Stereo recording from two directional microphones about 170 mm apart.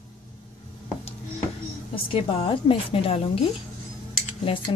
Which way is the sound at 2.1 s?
30° left (ahead or behind).